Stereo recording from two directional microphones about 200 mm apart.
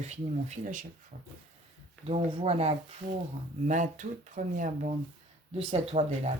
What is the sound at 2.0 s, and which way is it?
Speech, 30° right (ahead or behind).